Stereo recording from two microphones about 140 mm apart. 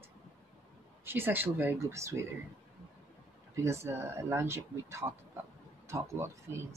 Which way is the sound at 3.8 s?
20° right (ahead or behind).